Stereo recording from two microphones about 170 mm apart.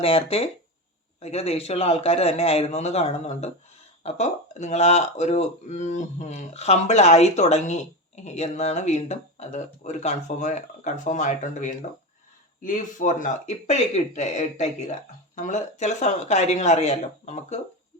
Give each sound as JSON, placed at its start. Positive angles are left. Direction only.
{"t": 0.0, "sound": "speech", "side_deg": 35}